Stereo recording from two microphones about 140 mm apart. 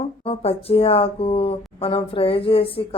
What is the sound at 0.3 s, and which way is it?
Speech, 40° left (ahead or behind).